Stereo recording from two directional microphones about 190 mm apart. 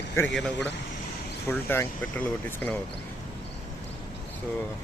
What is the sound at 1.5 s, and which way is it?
Speech, 10° left (ahead or behind).